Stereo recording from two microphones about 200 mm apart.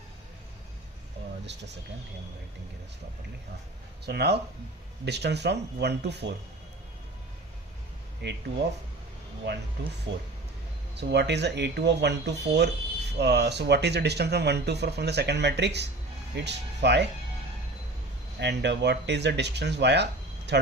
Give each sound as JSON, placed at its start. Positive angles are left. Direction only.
{"t": 4.0, "sound": "speech", "side_deg": -55}
{"t": 8.2, "sound": "speech", "side_deg": -60}
{"t": 10.1, "sound": "speech", "side_deg": -65}
{"t": 18.3, "sound": "speech", "side_deg": -60}